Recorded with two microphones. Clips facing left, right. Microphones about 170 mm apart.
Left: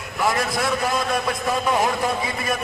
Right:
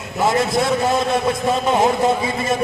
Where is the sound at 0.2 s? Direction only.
25° right (ahead or behind).